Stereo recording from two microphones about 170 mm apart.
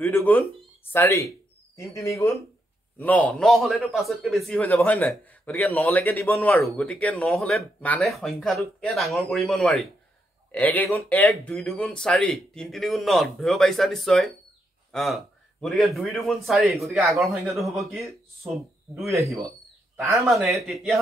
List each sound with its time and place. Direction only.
0.0 s a man's voice: 10° left (ahead or behind)
19.0 s speech: 15° right (ahead or behind)
20.5 s speech: centre (ahead or behind)